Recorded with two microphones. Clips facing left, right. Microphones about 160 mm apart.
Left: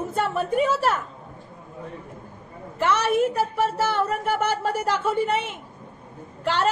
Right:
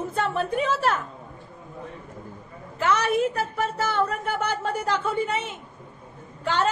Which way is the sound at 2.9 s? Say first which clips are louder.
Left 1 dB; 5° left (ahead or behind).